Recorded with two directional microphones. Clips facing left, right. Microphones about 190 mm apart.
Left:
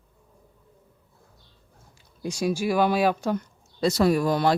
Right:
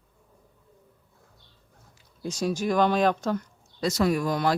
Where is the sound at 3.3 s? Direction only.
30° left (ahead or behind).